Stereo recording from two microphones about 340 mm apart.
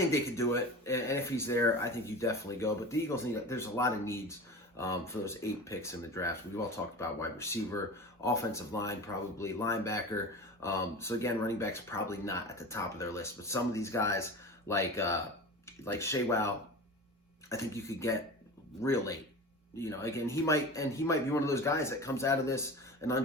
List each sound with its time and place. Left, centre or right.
0.1 s speech: centre